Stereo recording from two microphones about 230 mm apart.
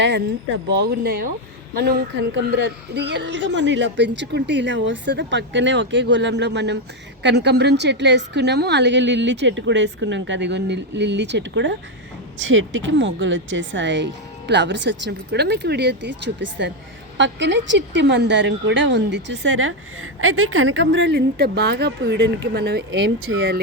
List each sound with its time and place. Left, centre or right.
0.0 s a woman's voice: right